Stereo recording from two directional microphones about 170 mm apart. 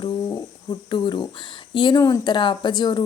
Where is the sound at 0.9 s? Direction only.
25° left (ahead or behind).